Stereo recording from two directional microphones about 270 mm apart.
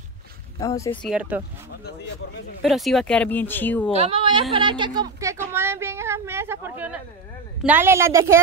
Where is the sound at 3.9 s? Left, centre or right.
Centre.